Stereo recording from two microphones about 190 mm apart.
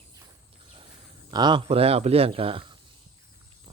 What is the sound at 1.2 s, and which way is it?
Speech, 25° right (ahead or behind).